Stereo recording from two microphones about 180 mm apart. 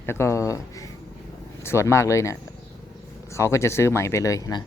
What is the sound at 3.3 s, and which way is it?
Speech, 15° left (ahead or behind).